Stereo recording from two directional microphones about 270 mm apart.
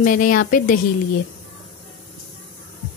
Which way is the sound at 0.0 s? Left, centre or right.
Left.